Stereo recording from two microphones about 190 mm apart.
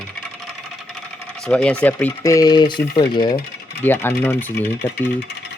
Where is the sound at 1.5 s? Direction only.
5° left (ahead or behind); by 3.3 s 20° left (ahead or behind).